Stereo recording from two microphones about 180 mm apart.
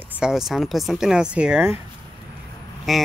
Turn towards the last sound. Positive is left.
turn(degrees=0)  # may be behind; listen again after turning